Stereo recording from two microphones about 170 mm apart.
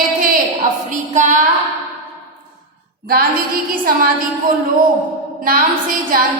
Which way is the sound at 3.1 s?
60° right (ahead or behind).